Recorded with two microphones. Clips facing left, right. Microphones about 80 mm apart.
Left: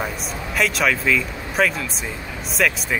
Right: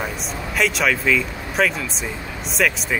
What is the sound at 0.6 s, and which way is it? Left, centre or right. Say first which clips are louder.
Speech: even; centre.